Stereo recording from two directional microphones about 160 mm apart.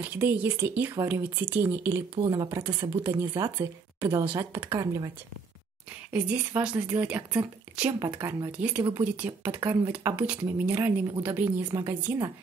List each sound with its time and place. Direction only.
0.0 s speech: 10° right (ahead or behind)
6.3 s speech: 5° right (ahead or behind)